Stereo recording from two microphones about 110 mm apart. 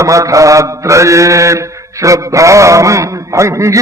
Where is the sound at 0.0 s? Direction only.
30° right (ahead or behind).